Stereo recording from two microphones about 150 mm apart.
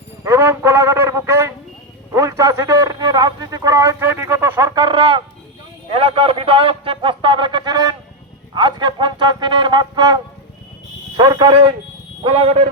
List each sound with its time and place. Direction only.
0.3 s music: 15° right (ahead or behind)
2.1 s a man's voice: 20° right (ahead or behind)
11.2 s a man's voice: 30° right (ahead or behind)